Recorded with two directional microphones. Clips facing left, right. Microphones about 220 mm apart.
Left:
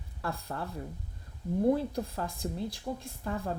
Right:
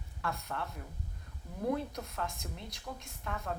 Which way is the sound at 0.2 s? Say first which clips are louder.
Left 2 dB; 30° left (ahead or behind).